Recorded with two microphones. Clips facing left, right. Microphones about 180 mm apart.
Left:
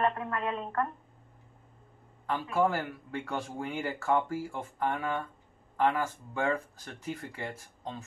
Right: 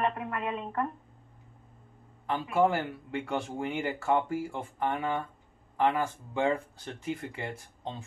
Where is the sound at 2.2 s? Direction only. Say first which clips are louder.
Right 2 dB; 20° right (ahead or behind).